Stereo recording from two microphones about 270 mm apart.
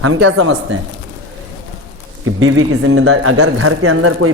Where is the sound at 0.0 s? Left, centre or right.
Right.